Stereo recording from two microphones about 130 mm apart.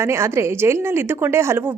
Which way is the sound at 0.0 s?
20° right (ahead or behind).